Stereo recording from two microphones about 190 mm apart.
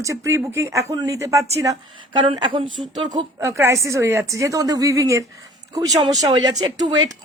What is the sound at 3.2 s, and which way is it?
Speech, 15° right (ahead or behind).